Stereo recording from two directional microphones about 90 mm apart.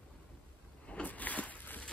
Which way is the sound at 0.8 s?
15° left (ahead or behind).